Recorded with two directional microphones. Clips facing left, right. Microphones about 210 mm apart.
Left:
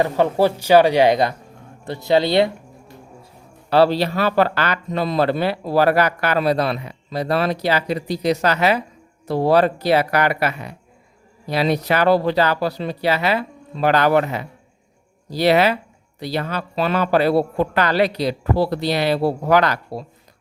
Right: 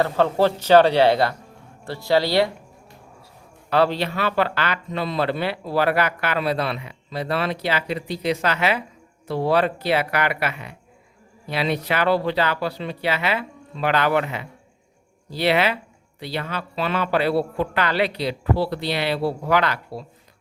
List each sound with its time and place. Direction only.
0.0 s speech: 15° left (ahead or behind)
3.7 s speech: 35° left (ahead or behind)